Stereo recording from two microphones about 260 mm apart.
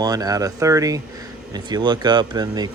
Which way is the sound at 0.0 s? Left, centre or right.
Centre.